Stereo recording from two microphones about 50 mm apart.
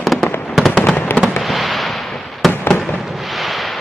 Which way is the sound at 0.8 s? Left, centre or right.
Left.